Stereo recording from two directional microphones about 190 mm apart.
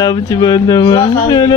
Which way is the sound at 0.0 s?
20° left (ahead or behind).